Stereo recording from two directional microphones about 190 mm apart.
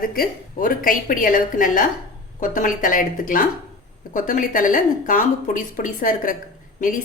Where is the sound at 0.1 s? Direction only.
50° left (ahead or behind).